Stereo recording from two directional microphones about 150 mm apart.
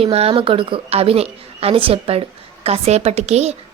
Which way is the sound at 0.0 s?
40° right (ahead or behind).